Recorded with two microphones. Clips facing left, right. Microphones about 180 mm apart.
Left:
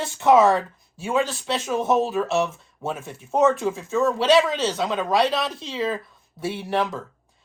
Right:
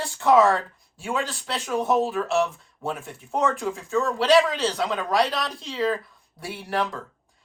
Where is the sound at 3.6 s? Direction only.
Centre (ahead or behind).